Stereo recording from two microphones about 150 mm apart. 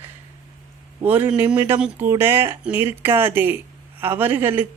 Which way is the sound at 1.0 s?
10° right (ahead or behind).